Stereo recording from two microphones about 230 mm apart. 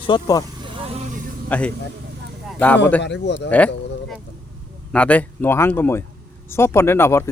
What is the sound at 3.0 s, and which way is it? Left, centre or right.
Speech, left.